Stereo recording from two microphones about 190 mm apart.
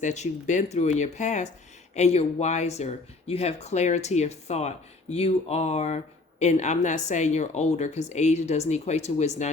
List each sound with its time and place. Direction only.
0.0 s speech: 40° left (ahead or behind)